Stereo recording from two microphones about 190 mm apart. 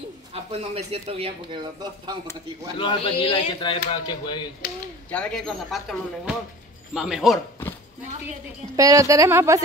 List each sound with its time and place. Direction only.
0.3 s speech: 35° right (ahead or behind)
2.8 s speech: 30° left (ahead or behind)
5.1 s speech: 5° left (ahead or behind)
8.7 s speech: 15° right (ahead or behind)